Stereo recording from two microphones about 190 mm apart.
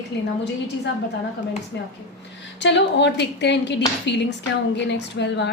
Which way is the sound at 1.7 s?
65° left (ahead or behind).